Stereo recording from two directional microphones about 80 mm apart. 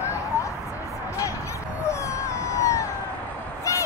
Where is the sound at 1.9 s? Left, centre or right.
Left.